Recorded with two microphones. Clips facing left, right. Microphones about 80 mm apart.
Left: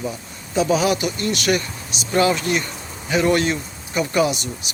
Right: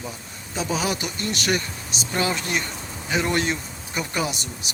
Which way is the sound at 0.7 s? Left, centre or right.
Right.